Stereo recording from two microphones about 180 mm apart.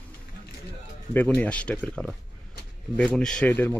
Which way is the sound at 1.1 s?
10° left (ahead or behind).